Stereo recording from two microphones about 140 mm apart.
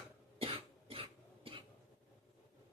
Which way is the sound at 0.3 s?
45° right (ahead or behind).